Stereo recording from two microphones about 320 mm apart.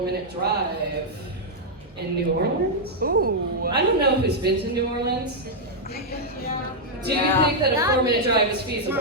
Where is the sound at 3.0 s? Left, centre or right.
Right.